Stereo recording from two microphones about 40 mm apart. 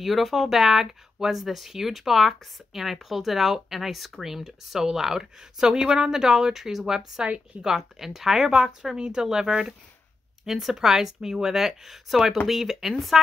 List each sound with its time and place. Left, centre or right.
0.0 s speech: centre
7.2 s a woman's voice: centre